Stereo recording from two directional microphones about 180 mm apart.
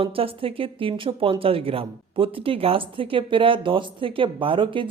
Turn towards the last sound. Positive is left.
turn(degrees=-30)  # may be behind; listen again after turning